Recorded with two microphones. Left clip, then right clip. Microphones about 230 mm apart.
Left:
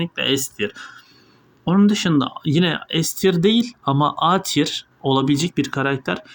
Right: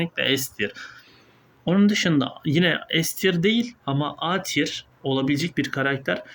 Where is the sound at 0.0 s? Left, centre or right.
Centre.